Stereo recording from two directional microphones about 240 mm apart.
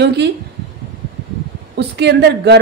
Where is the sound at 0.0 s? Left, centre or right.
Right.